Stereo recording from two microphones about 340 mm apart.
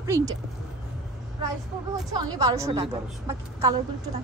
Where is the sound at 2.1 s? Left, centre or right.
Centre.